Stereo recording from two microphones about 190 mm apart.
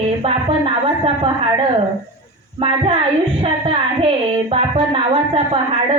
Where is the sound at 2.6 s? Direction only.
30° right (ahead or behind).